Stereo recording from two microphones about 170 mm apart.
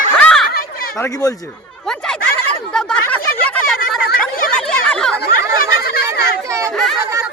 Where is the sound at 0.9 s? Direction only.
20° left (ahead or behind).